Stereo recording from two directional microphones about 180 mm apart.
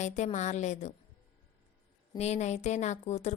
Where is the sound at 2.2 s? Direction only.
40° left (ahead or behind).